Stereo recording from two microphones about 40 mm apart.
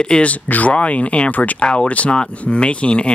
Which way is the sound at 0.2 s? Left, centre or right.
Left.